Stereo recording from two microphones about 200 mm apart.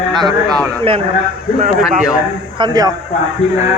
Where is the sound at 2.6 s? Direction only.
20° right (ahead or behind).